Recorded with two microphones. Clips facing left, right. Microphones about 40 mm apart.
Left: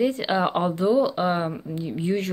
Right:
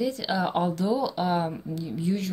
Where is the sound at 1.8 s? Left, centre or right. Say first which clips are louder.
Left 3 dB; left.